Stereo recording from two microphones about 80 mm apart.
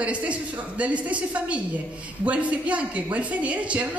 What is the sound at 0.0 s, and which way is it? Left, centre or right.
Speech, centre.